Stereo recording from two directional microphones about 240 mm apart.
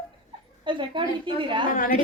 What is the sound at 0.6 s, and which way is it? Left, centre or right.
A woman's voice, right.